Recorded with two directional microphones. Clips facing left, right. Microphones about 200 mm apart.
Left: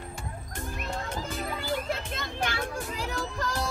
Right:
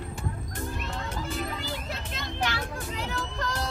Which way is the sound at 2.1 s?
50° left (ahead or behind).